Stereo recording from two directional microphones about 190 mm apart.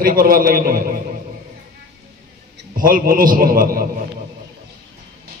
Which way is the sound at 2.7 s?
50° right (ahead or behind).